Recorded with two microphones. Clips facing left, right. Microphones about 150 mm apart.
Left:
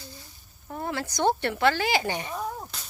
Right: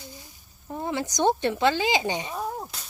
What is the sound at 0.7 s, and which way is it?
Speech, 15° right (ahead or behind).